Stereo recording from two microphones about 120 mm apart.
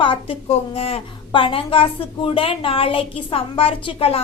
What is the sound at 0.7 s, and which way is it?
Speech, 55° left (ahead or behind).